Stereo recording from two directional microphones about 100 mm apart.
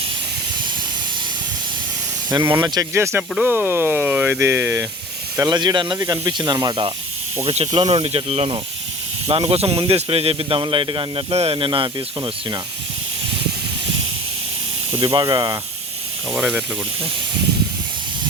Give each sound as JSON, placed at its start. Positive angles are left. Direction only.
{"t": 2.3, "sound": "speech", "side_deg": -35}
{"t": 5.4, "sound": "speech", "side_deg": -45}
{"t": 7.4, "sound": "speech", "side_deg": -75}
{"t": 10.6, "sound": "speech", "side_deg": -60}
{"t": 14.9, "sound": "speech", "side_deg": -55}
{"t": 16.3, "sound": "speech", "side_deg": -10}